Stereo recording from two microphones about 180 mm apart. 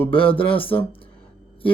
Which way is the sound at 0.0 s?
30° left (ahead or behind).